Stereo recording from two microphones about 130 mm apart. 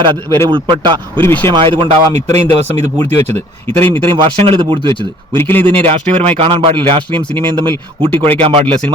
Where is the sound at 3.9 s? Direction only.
45° right (ahead or behind).